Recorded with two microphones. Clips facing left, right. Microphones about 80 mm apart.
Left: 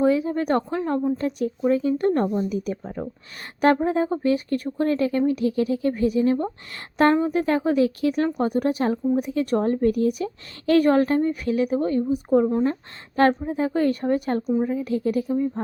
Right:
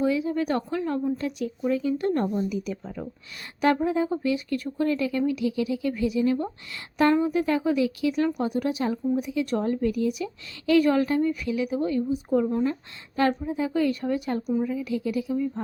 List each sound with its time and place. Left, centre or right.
0.0 s speech: left
2.2 s speech: left
2.5 s a woman's voice: left
13.1 s a woman's voice: left